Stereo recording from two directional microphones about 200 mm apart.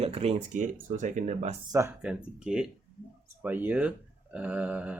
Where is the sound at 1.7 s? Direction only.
15° right (ahead or behind).